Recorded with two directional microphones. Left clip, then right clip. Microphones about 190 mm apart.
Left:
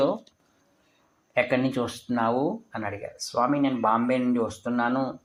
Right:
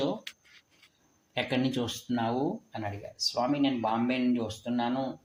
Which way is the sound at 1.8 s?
10° right (ahead or behind).